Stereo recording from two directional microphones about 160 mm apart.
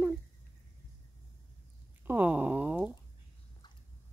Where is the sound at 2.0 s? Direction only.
10° right (ahead or behind).